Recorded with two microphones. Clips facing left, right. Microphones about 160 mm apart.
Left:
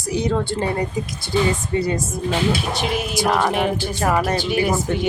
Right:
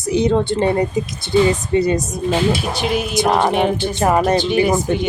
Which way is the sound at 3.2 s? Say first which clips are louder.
Right 3 dB; 25° right (ahead or behind).